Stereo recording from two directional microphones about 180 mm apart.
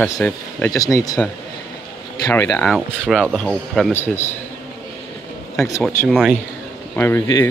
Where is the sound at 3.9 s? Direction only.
15° left (ahead or behind).